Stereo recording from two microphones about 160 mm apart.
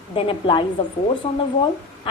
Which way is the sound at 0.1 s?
35° left (ahead or behind).